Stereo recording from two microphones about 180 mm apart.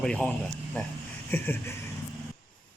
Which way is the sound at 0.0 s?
5° left (ahead or behind).